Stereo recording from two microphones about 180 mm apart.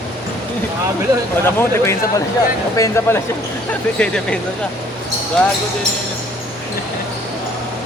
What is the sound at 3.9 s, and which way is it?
Speech, 5° left (ahead or behind).